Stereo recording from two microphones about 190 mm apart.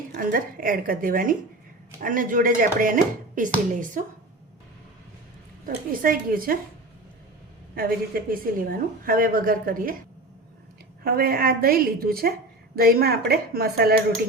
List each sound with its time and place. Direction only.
0.2 s a woman's voice: 45° right (ahead or behind)
5.6 s a woman's voice: 50° right (ahead or behind)
7.8 s a woman's voice: 50° right (ahead or behind)
11.0 s a woman's voice: 50° right (ahead or behind)